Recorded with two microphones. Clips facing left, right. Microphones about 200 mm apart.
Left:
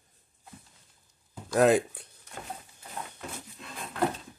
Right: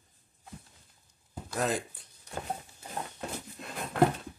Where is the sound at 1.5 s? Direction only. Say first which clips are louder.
Left 10 dB; 60° left (ahead or behind).